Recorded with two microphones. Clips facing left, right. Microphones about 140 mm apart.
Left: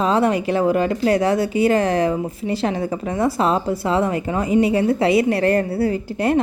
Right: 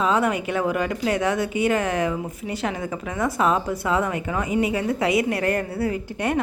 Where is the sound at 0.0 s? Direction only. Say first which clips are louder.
Left 4 dB; 35° left (ahead or behind).